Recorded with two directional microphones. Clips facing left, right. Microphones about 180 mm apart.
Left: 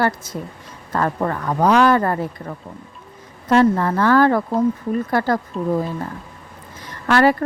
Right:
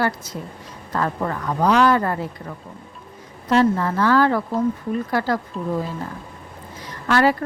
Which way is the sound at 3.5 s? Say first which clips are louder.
Left 3 dB; 55° left (ahead or behind).